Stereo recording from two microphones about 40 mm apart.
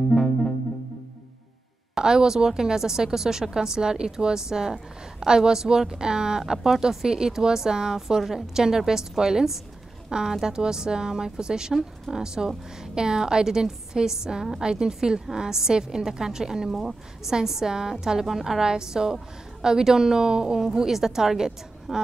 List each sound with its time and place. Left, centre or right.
2.0 s a woman's voice: centre